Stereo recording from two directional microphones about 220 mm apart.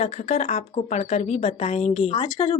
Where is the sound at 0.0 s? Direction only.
30° left (ahead or behind).